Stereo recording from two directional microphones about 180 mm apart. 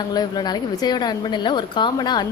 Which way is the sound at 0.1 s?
20° left (ahead or behind).